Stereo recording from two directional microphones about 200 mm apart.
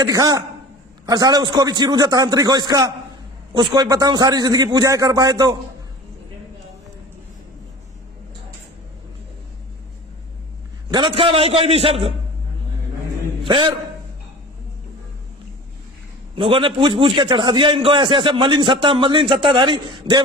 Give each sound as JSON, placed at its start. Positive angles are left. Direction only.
{"t": 0.0, "sound": "a man's voice", "side_deg": -20}
{"t": 10.9, "sound": "a man's voice", "side_deg": -25}
{"t": 13.4, "sound": "a man's voice", "side_deg": -25}
{"t": 16.3, "sound": "a man's voice", "side_deg": -25}